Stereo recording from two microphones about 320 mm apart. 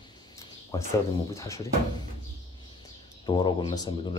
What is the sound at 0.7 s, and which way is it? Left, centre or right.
Speech, centre.